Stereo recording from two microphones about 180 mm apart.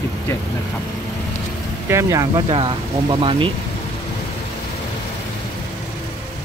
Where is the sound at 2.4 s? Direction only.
30° right (ahead or behind).